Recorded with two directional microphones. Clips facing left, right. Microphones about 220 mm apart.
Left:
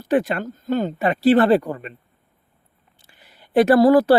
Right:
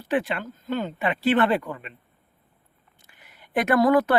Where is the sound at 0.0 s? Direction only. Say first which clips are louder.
Left 6 dB; 40° left (ahead or behind).